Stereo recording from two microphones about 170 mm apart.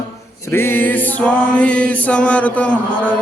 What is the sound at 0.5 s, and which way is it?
Chant, 15° left (ahead or behind).